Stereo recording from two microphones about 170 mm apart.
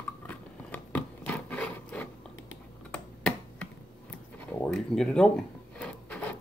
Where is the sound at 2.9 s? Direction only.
5° left (ahead or behind).